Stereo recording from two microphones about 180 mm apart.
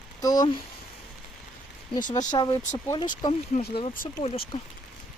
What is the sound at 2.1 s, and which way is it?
Speech, 20° left (ahead or behind).